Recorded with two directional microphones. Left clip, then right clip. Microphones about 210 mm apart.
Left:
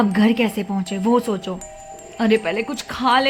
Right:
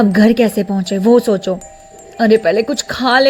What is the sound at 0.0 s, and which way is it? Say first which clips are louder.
A woman's voice: right 7 dB; 25° right (ahead or behind).